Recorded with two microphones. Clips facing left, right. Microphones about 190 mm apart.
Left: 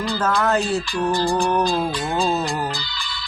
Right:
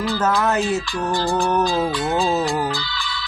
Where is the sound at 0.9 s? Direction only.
Centre (ahead or behind).